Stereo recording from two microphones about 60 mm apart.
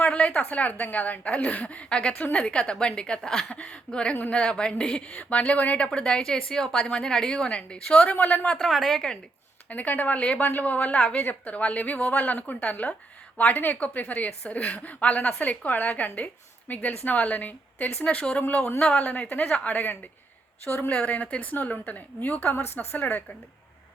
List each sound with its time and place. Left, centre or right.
0.0 s a sound: centre
0.4 s a woman's voice: left
8.6 s a woman's voice: centre
9.6 s a woman's voice: left
18.4 s a woman's voice: left
18.8 s a woman's voice: centre
19.0 s a woman's voice: left